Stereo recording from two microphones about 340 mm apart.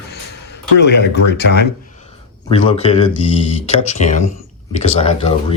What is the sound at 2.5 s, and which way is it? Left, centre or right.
Speech, centre.